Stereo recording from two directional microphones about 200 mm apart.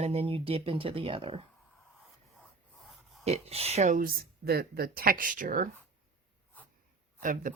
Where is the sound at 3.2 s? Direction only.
30° right (ahead or behind).